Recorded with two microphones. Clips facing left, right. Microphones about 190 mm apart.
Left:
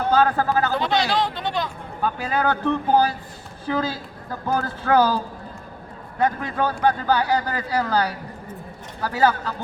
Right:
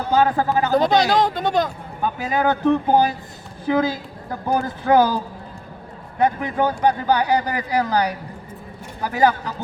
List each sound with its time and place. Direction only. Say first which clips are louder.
0.1 s speech: right 2 dB; 15° right (ahead or behind)
0.7 s speech: right 5 dB; 40° right (ahead or behind)
2.0 s speech: right 2 dB; 15° right (ahead or behind)